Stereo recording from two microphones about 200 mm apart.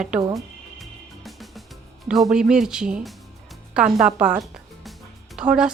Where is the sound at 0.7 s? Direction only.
Centre (ahead or behind).